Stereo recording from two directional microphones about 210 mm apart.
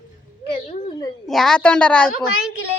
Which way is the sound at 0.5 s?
25° left (ahead or behind).